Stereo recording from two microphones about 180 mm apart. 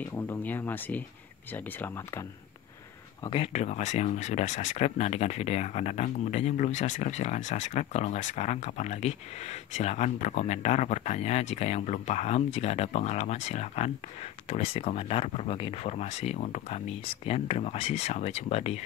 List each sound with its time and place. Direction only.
0.0 s speech: 10° left (ahead or behind)
3.3 s speech: 35° left (ahead or behind)